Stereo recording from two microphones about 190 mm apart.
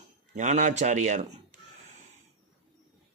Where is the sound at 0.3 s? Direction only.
40° right (ahead or behind).